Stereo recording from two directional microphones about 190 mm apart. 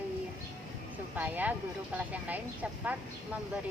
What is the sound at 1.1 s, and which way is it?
A woman's voice, 10° right (ahead or behind).